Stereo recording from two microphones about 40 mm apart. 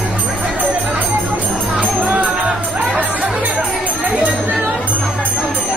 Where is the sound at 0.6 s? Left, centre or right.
Right.